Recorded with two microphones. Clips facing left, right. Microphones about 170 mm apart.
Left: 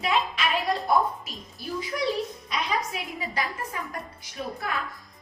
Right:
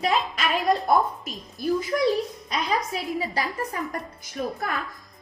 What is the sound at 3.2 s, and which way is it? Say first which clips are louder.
A woman's voice: right 3 dB; 40° right (ahead or behind).